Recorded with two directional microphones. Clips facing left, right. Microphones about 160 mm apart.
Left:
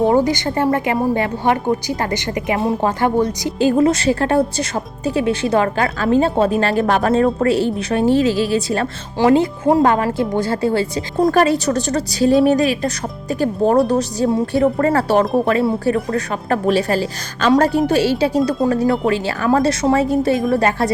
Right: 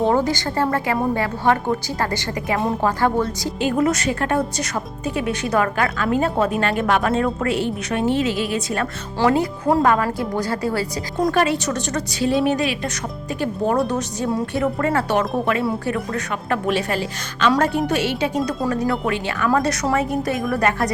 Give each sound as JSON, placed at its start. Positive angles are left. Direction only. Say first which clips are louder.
{"t": 0.0, "sound": "a woman's voice", "louder": "left 4 dB", "side_deg": 15}
{"t": 3.6, "sound": "a woman's voice", "louder": "left 5 dB", "side_deg": 30}
{"t": 11.3, "sound": "a woman's voice", "louder": "left 4 dB", "side_deg": 40}